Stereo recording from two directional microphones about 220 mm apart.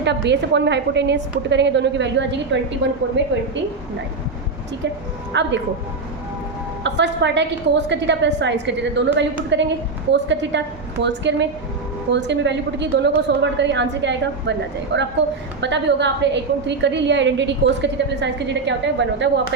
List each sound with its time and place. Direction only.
0.0 s a woman's voice: 50° right (ahead or behind)
5.3 s a woman's voice: 55° right (ahead or behind)
6.8 s a woman's voice: 55° right (ahead or behind)